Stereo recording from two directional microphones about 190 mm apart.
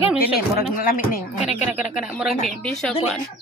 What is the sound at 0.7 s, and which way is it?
Speech, 50° left (ahead or behind).